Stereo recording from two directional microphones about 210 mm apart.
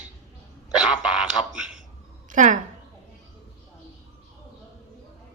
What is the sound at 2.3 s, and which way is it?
Speech, 35° right (ahead or behind).